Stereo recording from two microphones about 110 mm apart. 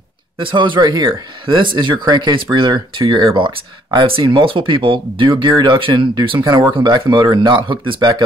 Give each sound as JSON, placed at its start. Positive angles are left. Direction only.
{"t": 0.4, "sound": "speech", "side_deg": -50}